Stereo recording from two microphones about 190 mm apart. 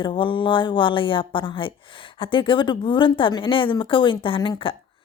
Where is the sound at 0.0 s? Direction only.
25° left (ahead or behind).